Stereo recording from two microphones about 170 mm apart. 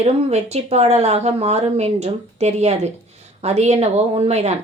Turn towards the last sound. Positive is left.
turn(degrees=-40)  # may be behind; listen again after turning